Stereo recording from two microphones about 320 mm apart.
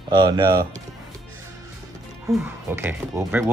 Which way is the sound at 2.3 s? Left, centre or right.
Centre.